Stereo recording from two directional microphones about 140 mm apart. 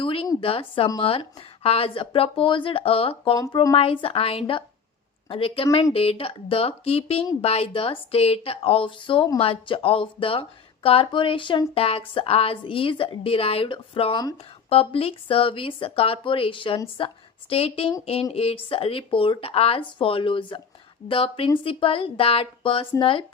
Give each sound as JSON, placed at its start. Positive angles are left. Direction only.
{"t": 0.0, "sound": "a sound", "side_deg": 40}
{"t": 0.3, "sound": "speech", "side_deg": 40}
{"t": 3.3, "sound": "speech", "side_deg": 25}
{"t": 3.8, "sound": "a woman's voice", "side_deg": 40}